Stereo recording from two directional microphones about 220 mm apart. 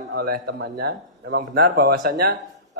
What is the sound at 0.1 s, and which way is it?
Mantra, 45° right (ahead or behind).